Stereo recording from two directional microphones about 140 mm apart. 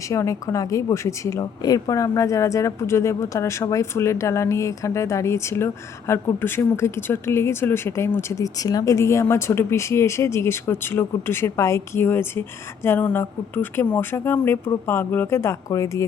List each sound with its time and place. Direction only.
0.1 s speech: 20° left (ahead or behind)